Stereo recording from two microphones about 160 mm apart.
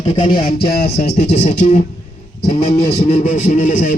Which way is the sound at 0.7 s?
85° left.